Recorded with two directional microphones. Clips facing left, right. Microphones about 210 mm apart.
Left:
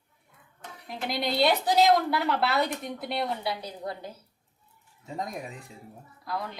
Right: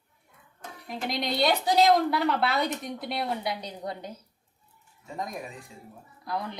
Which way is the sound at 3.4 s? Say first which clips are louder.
Even; 20° right (ahead or behind).